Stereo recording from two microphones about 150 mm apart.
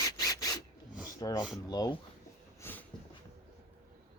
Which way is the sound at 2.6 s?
15° left (ahead or behind).